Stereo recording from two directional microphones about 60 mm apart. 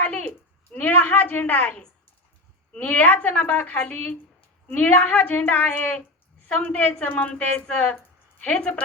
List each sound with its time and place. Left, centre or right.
0.1 s a sound: left
2.7 s speech: left
3.8 s speech: left